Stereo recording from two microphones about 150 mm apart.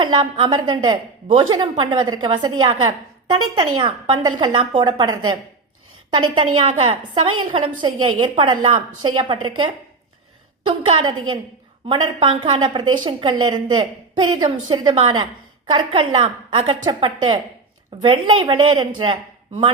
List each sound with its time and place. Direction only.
0.0 s a woman's voice: 35° right (ahead or behind)